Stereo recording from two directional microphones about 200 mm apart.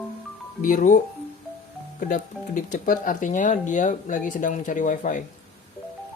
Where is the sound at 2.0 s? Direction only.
40° left (ahead or behind).